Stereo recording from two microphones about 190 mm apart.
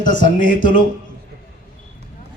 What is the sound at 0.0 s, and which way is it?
Speech, 45° left (ahead or behind).